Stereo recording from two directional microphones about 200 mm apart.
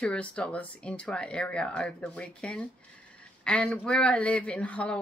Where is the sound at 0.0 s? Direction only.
5° left (ahead or behind).